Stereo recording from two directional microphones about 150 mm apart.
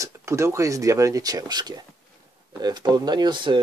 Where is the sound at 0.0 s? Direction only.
20° right (ahead or behind).